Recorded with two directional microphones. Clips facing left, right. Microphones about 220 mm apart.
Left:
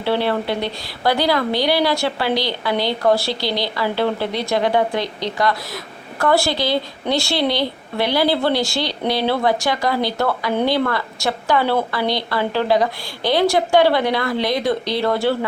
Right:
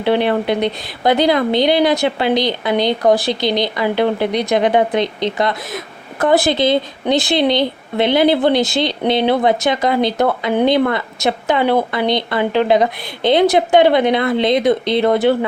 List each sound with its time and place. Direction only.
0.0 s a woman's voice: 20° right (ahead or behind)